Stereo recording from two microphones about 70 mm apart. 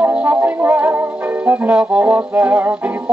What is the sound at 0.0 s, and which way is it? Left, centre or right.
Music, right.